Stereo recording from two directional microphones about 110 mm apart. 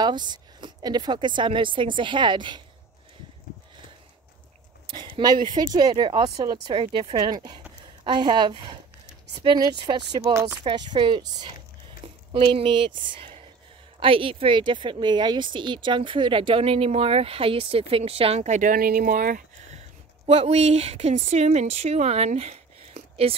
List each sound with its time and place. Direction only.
0.0 s a woman's voice: 40° right (ahead or behind)
4.8 s speech: 45° right (ahead or behind)
6.8 s a woman's voice: 50° right (ahead or behind); by 10.4 s 35° right (ahead or behind)
10.6 s a woman's voice: 50° right (ahead or behind); by 18.6 s 80° right
20.2 s a woman's voice: 70° right (ahead or behind)